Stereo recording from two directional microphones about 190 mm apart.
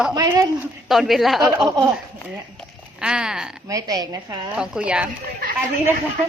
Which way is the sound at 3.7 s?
20° right (ahead or behind).